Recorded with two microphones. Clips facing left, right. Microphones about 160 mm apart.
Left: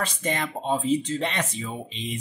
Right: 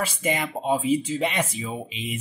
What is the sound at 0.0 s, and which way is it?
Speech, 10° right (ahead or behind).